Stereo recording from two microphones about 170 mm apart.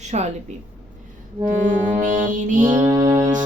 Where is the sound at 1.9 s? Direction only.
50° right (ahead or behind).